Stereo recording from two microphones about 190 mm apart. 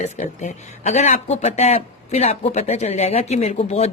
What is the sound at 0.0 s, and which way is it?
Speech, 40° left (ahead or behind).